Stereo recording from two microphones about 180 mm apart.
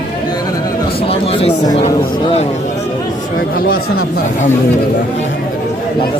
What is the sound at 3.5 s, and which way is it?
Speech, 55° left (ahead or behind).